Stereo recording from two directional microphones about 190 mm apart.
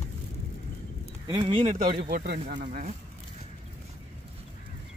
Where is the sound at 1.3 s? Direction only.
30° right (ahead or behind).